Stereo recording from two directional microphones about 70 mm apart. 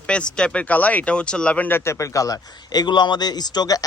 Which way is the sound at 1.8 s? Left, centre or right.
Left.